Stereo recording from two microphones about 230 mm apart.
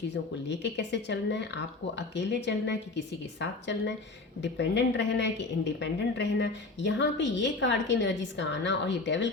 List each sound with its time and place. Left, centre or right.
0.1 s a woman's voice: left
4.4 s a woman's voice: left